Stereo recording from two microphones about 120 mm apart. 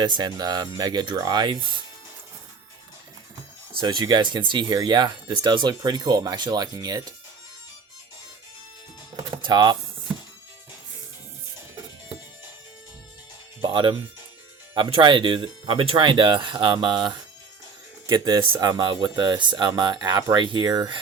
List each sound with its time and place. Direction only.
0.0 s speech: 40° right (ahead or behind)
3.8 s speech: 35° right (ahead or behind)
9.1 s music: 40° right (ahead or behind)
13.6 s speech: 45° right (ahead or behind)